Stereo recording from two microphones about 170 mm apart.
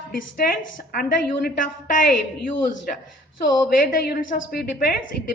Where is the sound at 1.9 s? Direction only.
55° left (ahead or behind).